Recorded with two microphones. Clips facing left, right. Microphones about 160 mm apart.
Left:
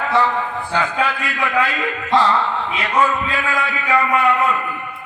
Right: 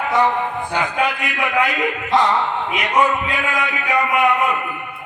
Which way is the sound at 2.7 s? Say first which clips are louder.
Right 1 dB; 15° right (ahead or behind).